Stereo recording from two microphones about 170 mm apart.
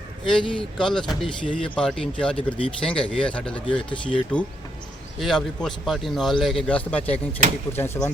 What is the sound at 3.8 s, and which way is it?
Speech, 30° left (ahead or behind).